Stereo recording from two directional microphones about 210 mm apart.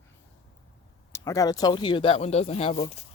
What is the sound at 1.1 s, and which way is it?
Speech, 15° left (ahead or behind).